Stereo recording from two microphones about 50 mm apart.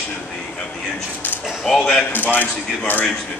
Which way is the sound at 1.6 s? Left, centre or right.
Centre.